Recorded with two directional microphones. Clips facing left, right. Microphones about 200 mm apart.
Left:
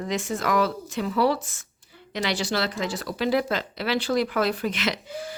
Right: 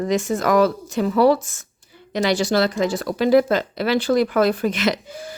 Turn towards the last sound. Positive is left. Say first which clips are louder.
# right 6 dB
turn(degrees=-45)  # may be behind; listen again after turning